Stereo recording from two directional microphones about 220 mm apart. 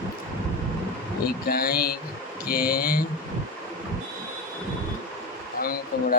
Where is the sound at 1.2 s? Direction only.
45° left (ahead or behind).